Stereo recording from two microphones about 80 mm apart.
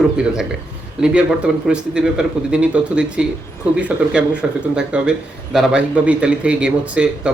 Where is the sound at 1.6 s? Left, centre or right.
Centre.